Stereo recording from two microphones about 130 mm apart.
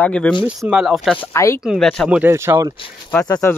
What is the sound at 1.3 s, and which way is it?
Speech, 20° left (ahead or behind).